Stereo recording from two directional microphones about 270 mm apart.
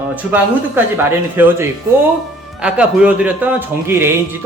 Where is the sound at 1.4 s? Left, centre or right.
Centre.